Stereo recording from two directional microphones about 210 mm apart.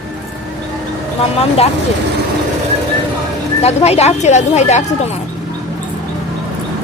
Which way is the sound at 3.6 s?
30° left (ahead or behind).